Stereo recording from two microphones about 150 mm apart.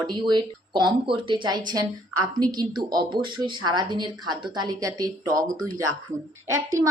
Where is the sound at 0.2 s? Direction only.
30° right (ahead or behind).